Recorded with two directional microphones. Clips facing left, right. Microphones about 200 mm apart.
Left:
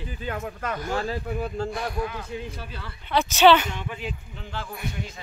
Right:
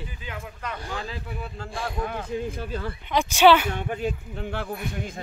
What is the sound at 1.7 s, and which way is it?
Speech, 30° right (ahead or behind).